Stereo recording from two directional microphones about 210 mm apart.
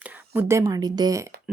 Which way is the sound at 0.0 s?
10° right (ahead or behind).